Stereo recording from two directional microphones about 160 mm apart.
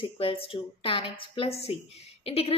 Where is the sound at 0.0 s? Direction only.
35° left (ahead or behind).